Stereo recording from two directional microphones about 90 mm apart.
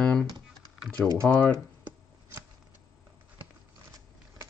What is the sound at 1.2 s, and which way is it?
Speech, 10° left (ahead or behind).